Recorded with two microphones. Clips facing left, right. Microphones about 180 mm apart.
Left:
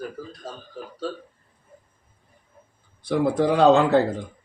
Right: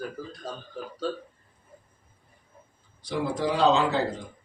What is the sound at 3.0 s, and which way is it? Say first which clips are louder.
Speech: left 7 dB; 55° left (ahead or behind).